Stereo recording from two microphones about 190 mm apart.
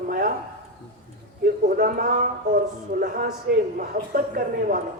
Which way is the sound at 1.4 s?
45° right (ahead or behind).